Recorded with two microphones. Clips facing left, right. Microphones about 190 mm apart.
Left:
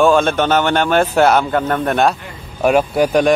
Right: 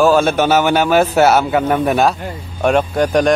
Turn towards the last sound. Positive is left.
turn(degrees=5)  # may be behind; listen again after turning